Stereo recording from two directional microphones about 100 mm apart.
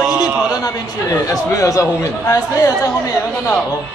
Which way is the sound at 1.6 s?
30° left (ahead or behind).